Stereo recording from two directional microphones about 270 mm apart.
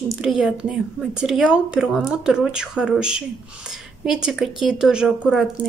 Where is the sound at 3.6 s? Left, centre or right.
Centre.